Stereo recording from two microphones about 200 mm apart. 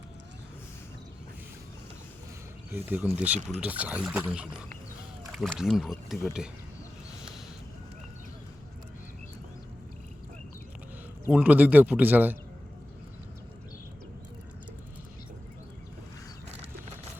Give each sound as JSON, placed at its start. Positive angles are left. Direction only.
{"t": 2.9, "sound": "speech", "side_deg": -5}
{"t": 11.3, "sound": "speech", "side_deg": -5}